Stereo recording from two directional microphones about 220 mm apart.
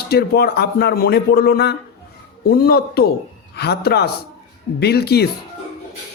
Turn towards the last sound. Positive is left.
turn(degrees=45)  # may be behind; listen again after turning